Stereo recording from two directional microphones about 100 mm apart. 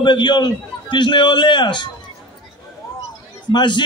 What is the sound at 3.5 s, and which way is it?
Speech, 50° left (ahead or behind).